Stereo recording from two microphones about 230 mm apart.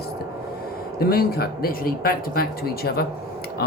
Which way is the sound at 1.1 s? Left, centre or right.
Left.